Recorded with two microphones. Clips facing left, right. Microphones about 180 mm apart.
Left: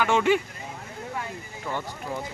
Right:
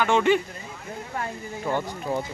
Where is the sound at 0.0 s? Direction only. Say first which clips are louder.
Right 1 dB; 5° left (ahead or behind).